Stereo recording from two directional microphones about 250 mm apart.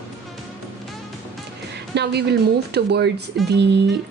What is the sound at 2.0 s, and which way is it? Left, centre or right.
Speech, right.